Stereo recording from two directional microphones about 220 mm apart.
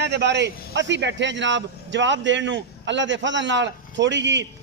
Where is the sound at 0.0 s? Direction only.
50° right (ahead or behind).